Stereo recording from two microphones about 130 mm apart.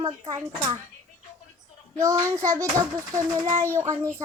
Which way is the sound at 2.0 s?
25° right (ahead or behind).